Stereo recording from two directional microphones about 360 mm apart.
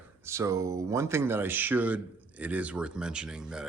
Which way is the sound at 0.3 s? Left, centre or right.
Centre.